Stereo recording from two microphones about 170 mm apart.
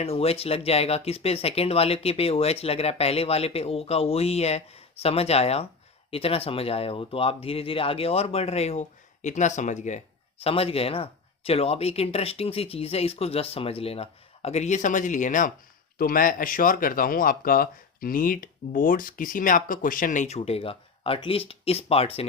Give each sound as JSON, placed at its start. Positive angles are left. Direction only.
{"t": 0.0, "sound": "speech", "side_deg": 35}
{"t": 10.4, "sound": "speech", "side_deg": 35}